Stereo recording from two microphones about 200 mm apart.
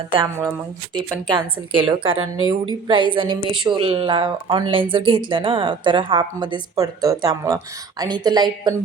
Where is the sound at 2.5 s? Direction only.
25° right (ahead or behind).